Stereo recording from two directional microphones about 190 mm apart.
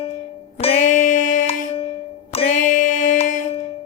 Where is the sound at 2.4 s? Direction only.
45° left (ahead or behind).